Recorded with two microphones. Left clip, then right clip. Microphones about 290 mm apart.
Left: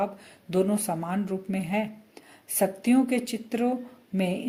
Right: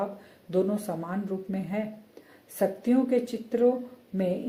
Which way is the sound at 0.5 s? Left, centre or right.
Left.